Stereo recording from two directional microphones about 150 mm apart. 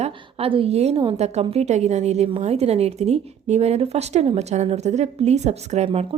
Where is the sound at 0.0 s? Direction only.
35° right (ahead or behind).